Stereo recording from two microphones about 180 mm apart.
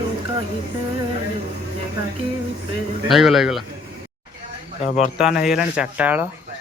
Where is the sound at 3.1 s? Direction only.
Centre (ahead or behind).